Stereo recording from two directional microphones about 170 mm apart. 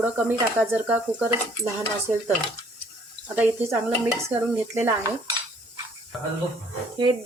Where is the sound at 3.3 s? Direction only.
10° right (ahead or behind).